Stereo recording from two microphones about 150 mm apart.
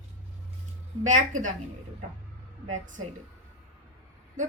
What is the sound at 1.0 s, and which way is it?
Speech, 60° right (ahead or behind).